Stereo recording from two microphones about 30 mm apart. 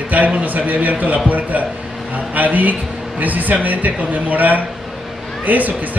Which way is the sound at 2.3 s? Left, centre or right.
Right.